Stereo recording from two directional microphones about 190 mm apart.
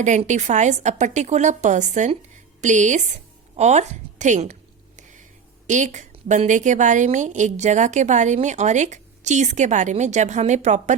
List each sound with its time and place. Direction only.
0.0 s a woman's voice: 40° right (ahead or behind)
4.9 s a sound: 40° right (ahead or behind)
5.6 s a woman's voice: 40° right (ahead or behind)